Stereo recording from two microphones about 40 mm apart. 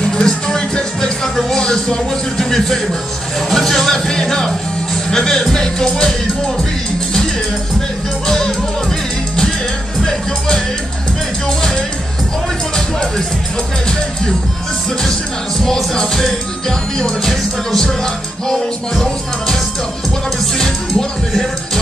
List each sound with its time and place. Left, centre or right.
0.0 s music: centre
1.6 s music: centre
2.3 s speech: centre
3.4 s music: centre
8.3 s music: centre
11.4 s music: centre
15.6 s music: centre